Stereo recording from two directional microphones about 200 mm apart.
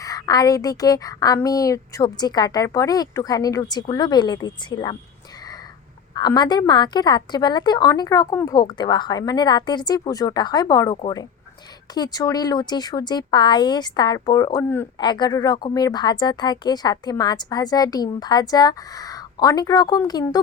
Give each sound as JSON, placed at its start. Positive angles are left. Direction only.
{"t": 0.0, "sound": "a woman's voice", "side_deg": 15}
{"t": 6.1, "sound": "speech", "side_deg": 20}